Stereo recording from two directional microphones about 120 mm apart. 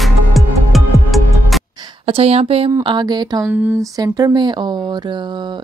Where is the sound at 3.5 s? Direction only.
15° right (ahead or behind).